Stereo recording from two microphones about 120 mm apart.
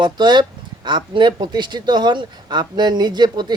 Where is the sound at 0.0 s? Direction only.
35° right (ahead or behind).